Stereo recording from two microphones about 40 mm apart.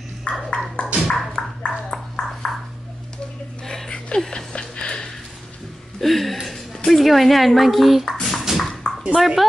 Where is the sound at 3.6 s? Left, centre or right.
Centre.